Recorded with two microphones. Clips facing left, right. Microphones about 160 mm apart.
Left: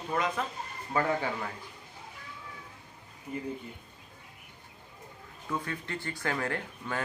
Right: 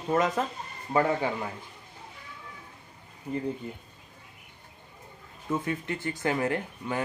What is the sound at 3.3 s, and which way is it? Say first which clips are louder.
Speech: right 5 dB; 35° right (ahead or behind).